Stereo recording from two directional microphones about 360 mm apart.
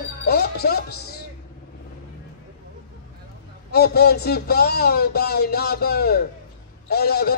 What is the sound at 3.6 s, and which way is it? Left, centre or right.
Speech, left.